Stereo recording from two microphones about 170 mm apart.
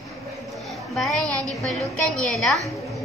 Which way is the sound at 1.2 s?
20° right (ahead or behind).